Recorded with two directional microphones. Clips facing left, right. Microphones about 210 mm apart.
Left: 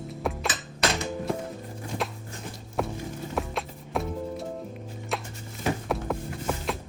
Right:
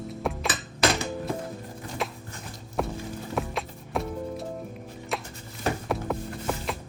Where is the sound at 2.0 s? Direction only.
Centre (ahead or behind).